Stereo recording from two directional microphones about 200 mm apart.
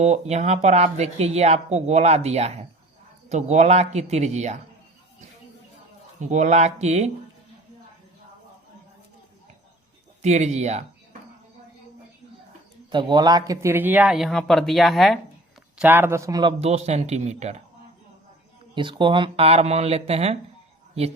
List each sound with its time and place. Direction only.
0.0 s speech: 35° right (ahead or behind)
6.1 s speech: 35° right (ahead or behind)
10.2 s speech: 35° right (ahead or behind)
12.9 s speech: 25° right (ahead or behind); by 15.2 s centre (ahead or behind)
15.8 s speech: 10° right (ahead or behind); by 17.6 s 35° right (ahead or behind)
18.7 s speech: 25° right (ahead or behind)